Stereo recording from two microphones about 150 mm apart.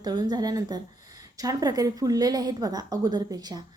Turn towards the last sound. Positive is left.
turn(degrees=-25)  # may be behind; listen again after turning